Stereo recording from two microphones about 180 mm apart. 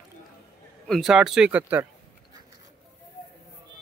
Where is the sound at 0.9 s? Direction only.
Centre (ahead or behind).